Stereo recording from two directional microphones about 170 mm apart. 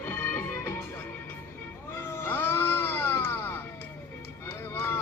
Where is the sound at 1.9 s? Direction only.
15° left (ahead or behind).